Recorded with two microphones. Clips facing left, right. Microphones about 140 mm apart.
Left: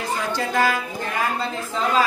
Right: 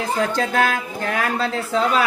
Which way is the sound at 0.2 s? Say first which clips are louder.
Right 3 dB; 65° right (ahead or behind).